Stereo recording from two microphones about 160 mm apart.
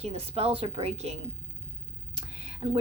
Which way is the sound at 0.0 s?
40° right (ahead or behind).